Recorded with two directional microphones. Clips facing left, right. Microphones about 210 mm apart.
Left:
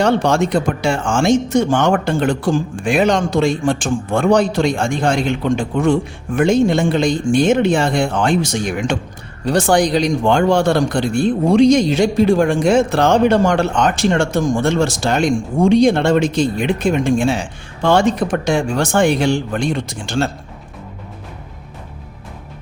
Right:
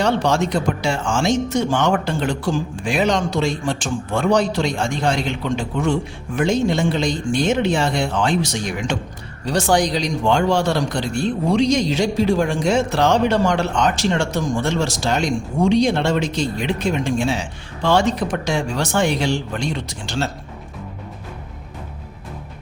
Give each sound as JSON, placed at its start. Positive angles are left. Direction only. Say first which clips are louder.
{"t": 0.0, "sound": "a man's voice", "louder": "left 4 dB", "side_deg": 50}